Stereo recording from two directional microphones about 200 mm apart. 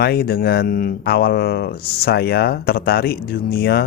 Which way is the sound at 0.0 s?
50° left (ahead or behind).